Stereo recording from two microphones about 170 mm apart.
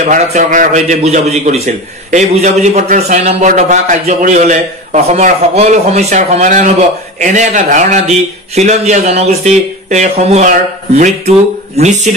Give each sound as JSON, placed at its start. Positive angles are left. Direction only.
{"t": 0.0, "sound": "a man's voice", "side_deg": -45}